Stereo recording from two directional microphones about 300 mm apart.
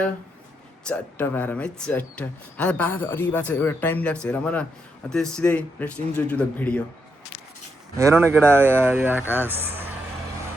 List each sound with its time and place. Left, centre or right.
0.9 s speech: centre
7.9 s speech: centre